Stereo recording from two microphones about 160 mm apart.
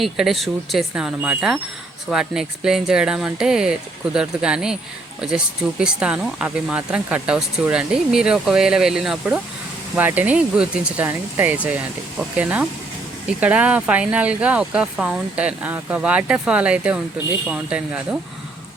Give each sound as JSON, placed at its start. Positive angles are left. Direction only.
{"t": 0.0, "sound": "speech", "side_deg": 0}
{"t": 5.8, "sound": "speech", "side_deg": -5}